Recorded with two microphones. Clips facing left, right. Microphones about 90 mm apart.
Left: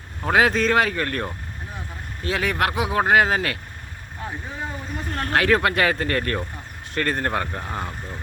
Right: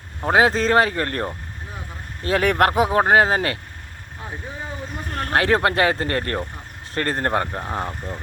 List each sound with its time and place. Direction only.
0.2 s speech: 25° right (ahead or behind)
2.2 s speech: 50° right (ahead or behind); by 3.6 s 35° right (ahead or behind)
5.3 s speech: 30° right (ahead or behind)
7.6 s speech: 25° right (ahead or behind)